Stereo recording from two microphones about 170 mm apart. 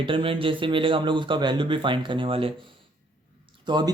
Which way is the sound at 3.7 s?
25° right (ahead or behind).